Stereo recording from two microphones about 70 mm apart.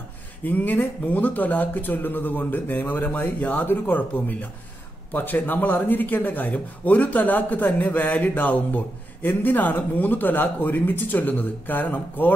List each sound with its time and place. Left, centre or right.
0.4 s speech: left